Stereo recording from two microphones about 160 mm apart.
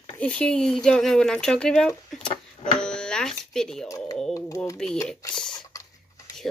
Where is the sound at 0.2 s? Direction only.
5° left (ahead or behind).